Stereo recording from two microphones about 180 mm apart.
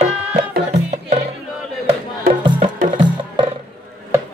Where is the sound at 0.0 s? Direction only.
40° right (ahead or behind).